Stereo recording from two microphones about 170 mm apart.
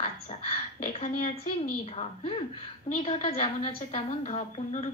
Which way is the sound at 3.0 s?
35° left (ahead or behind).